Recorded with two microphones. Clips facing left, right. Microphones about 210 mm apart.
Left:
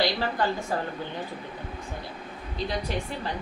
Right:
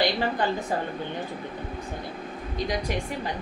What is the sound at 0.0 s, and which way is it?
Speech, 20° right (ahead or behind).